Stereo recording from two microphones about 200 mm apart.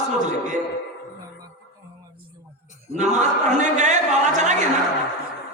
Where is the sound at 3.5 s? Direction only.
35° right (ahead or behind).